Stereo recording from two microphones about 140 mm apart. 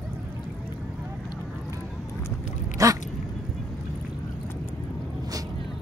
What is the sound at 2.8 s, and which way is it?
Speech, 20° right (ahead or behind).